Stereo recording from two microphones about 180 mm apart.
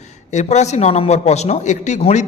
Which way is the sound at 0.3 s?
40° left (ahead or behind).